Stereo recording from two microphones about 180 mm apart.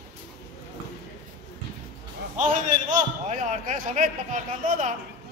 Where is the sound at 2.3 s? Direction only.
45° right (ahead or behind).